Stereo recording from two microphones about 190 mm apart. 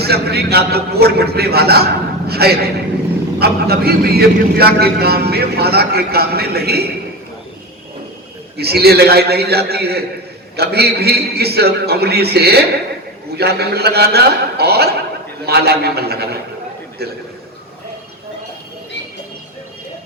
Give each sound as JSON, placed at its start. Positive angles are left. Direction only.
{"t": 0.0, "sound": "a man's voice", "side_deg": -55}
{"t": 8.5, "sound": "a man's voice", "side_deg": -55}